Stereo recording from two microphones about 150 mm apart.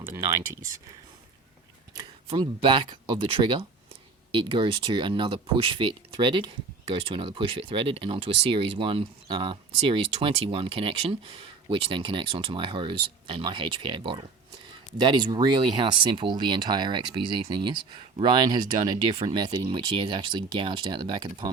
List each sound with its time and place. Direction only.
0.1 s speech: 20° right (ahead or behind)
2.0 s speech: 35° right (ahead or behind)